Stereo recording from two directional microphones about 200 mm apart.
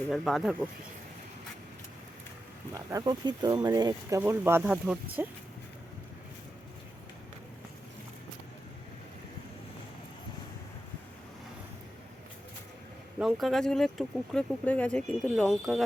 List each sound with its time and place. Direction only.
0.1 s speech: centre (ahead or behind)
2.7 s speech: 20° right (ahead or behind)
13.1 s speech: centre (ahead or behind)